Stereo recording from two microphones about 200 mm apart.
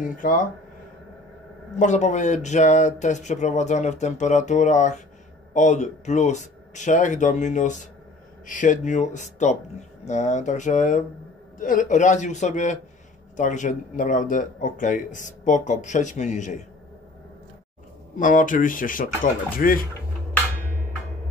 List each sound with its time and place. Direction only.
0.0 s speech: 40° left (ahead or behind)
1.8 s speech: 35° left (ahead or behind)
18.1 s speech: 40° left (ahead or behind)